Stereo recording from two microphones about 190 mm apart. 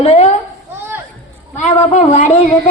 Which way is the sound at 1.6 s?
35° left (ahead or behind).